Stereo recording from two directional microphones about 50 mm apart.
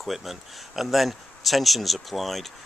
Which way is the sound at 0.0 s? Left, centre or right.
Centre.